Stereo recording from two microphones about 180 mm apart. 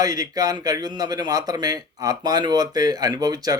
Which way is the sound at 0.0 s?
20° right (ahead or behind).